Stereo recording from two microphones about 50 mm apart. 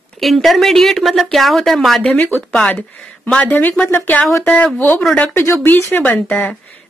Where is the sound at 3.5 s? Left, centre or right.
Left.